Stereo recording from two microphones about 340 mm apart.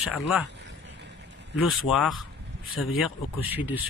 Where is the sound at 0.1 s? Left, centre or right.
Centre.